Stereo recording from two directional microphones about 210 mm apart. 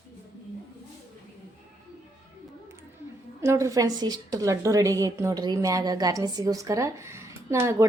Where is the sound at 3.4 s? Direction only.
15° right (ahead or behind).